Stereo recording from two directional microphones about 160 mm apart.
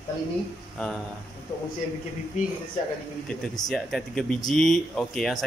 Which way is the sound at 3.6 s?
Centre (ahead or behind).